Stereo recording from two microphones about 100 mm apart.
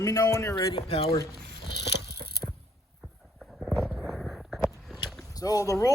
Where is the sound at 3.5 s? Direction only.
Centre (ahead or behind).